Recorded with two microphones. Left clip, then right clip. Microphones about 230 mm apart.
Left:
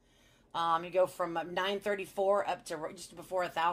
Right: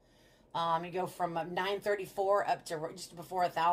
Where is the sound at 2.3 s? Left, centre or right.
Left.